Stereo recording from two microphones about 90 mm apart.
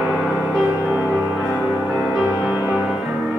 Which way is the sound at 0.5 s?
10° right (ahead or behind).